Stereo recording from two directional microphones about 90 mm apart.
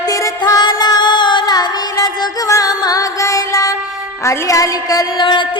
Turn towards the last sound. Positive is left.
turn(degrees=55)  # may be behind; listen again after turning